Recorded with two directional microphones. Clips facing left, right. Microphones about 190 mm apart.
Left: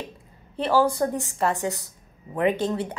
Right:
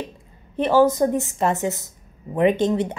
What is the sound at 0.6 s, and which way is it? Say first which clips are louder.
A woman's voice: right 5 dB; 20° right (ahead or behind).